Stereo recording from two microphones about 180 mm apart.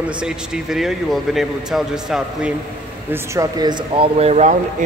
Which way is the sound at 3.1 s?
15° right (ahead or behind).